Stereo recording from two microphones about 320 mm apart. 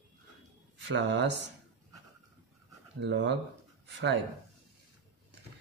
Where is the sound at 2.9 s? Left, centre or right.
Right.